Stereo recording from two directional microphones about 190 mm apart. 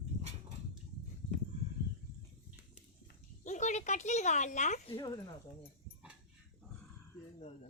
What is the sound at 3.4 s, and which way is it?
Speech, 40° left (ahead or behind).